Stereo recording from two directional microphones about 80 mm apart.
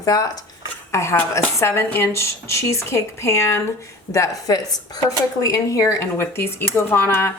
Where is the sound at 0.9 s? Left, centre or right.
Left.